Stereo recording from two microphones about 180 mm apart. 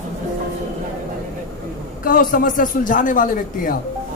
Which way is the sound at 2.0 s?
50° left (ahead or behind).